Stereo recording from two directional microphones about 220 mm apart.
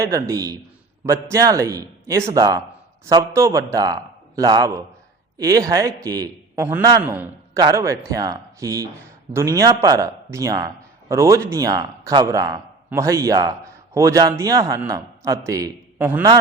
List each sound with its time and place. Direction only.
0.0 s a man's voice: 15° right (ahead or behind)